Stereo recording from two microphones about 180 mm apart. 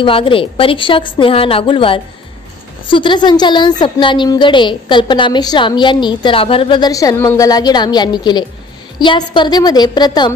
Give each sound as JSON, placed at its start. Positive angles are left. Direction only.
{"t": 0.0, "sound": "a woman's voice", "side_deg": 30}